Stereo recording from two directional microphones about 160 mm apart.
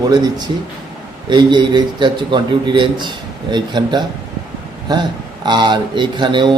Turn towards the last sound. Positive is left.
turn(degrees=-30)  # may be behind; listen again after turning